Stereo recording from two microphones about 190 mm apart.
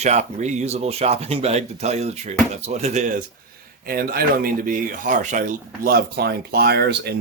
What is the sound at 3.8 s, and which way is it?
Speech, 50° right (ahead or behind).